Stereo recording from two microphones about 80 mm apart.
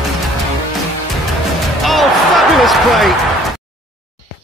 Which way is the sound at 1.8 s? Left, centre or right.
Centre.